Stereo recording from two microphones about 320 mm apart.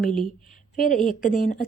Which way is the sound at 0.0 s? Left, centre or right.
Left.